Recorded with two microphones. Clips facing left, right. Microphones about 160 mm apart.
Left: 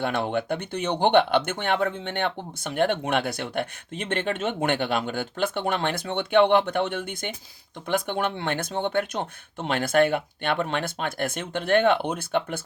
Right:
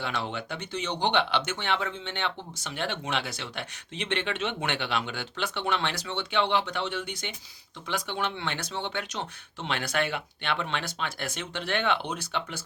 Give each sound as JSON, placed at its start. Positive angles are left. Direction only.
{"t": 0.0, "sound": "speech", "side_deg": 50}